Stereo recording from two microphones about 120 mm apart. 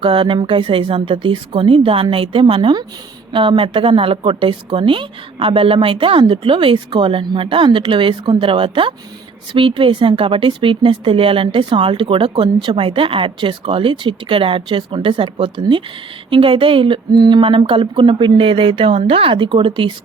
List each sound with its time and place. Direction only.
0.0 s a woman's voice: 45° right (ahead or behind)